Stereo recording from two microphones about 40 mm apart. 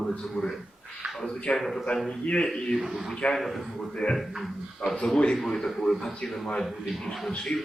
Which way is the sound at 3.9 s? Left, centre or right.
Left.